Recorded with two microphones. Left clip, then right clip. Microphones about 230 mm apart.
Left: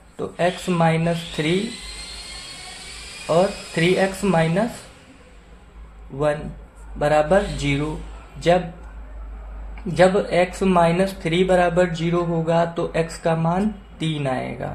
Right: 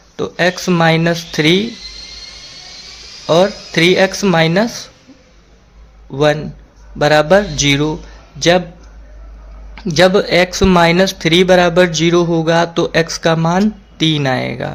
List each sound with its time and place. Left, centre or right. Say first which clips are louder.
0.2 s speech: right 7 dB; right
3.2 s speech: right 7 dB; right
7.0 s a man's voice: right 7 dB; right
9.9 s speech: right 6 dB; right